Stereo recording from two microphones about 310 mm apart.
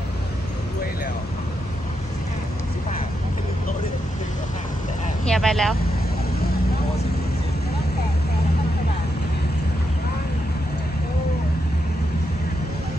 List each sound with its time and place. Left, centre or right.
5.3 s speech: centre